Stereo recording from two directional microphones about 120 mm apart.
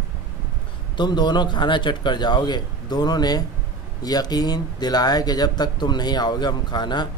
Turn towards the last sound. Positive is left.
turn(degrees=40)  # may be behind; listen again after turning